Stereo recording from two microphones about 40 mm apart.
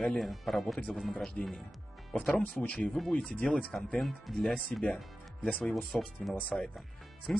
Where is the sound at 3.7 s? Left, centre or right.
Centre.